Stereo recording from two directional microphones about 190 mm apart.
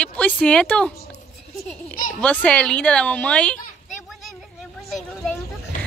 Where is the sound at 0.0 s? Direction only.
5° left (ahead or behind).